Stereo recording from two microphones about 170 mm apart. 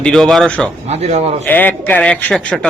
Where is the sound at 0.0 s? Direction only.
5° left (ahead or behind).